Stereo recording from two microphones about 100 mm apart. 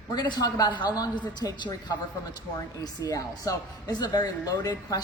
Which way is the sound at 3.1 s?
35° left (ahead or behind).